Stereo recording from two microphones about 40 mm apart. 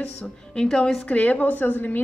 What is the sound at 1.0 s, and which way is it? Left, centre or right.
Speech, left.